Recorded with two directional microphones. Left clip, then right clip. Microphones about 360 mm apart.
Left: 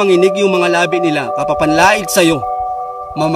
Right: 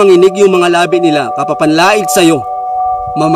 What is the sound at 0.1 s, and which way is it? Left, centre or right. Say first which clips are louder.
A man's voice: right 5 dB; centre.